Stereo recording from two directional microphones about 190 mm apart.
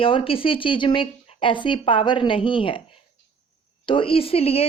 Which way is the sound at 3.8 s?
25° left (ahead or behind).